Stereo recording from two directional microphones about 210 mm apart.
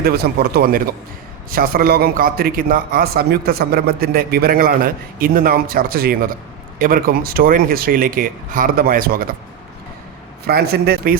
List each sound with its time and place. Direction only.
0.0 s a man's voice: 50° right (ahead or behind)
10.4 s a man's voice: 50° right (ahead or behind)